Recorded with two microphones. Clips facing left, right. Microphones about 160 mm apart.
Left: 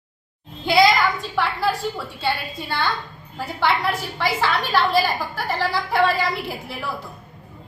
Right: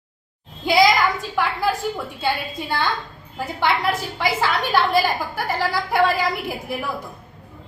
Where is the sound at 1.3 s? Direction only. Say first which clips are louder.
Even; 15° right (ahead or behind).